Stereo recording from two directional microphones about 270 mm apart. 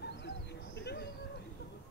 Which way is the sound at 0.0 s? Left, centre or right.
Left.